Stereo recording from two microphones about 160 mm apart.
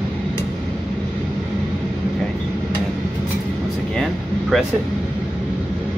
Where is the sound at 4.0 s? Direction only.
Centre (ahead or behind).